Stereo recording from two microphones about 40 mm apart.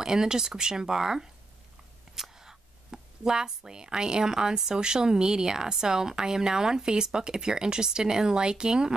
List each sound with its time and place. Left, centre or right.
0.0 s speech: centre
2.1 s a sound: centre
4.6 s speech: centre